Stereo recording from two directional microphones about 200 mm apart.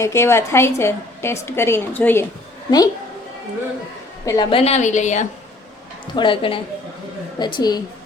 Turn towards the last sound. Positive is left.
turn(degrees=20)  # may be behind; listen again after turning